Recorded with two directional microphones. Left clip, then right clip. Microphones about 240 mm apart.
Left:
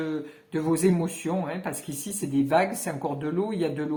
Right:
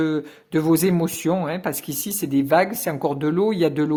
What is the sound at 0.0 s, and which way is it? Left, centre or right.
A man's voice, right.